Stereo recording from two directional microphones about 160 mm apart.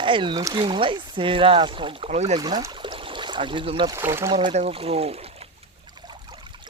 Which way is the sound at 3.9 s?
15° right (ahead or behind).